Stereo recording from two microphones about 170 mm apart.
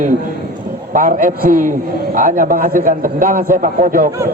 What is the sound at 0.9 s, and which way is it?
A man's voice, 50° right (ahead or behind).